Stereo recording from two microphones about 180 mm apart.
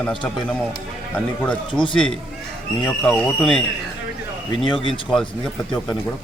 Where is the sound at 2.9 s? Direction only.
5° left (ahead or behind).